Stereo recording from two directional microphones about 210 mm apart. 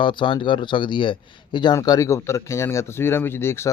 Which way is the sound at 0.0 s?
25° left (ahead or behind).